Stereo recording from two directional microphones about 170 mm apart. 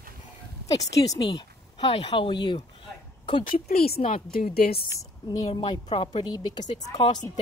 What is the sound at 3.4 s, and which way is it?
Speech, 55° left (ahead or behind).